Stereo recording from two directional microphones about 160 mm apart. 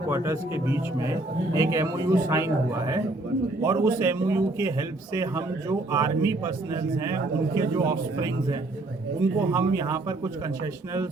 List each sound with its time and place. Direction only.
0.1 s a man's voice: 15° right (ahead or behind)